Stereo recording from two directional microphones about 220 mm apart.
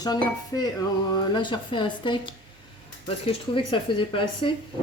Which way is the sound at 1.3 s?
20° left (ahead or behind).